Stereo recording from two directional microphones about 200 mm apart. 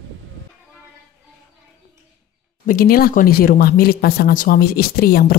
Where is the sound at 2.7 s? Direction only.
45° left (ahead or behind).